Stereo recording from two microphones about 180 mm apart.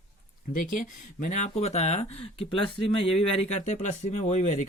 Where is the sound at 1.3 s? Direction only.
40° left (ahead or behind).